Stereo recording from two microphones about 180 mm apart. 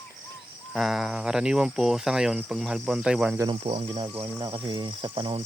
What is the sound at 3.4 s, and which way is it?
Speech, 25° right (ahead or behind).